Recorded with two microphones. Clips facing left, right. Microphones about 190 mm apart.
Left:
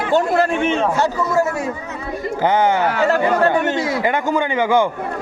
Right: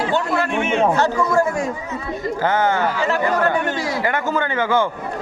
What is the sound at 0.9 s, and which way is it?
A man's voice, 5° left (ahead or behind).